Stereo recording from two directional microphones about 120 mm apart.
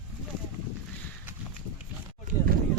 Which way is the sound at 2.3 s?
90° right.